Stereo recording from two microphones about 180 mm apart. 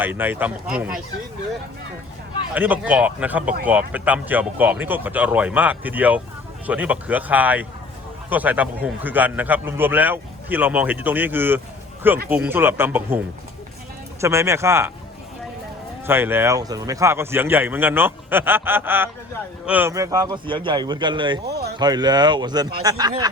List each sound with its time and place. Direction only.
0.0 s a man's voice: 10° right (ahead or behind)
2.6 s a man's voice: 10° right (ahead or behind)
16.0 s a man's voice: 10° right (ahead or behind)
21.4 s speech: 65° right (ahead or behind)
21.8 s a man's voice: 25° right (ahead or behind)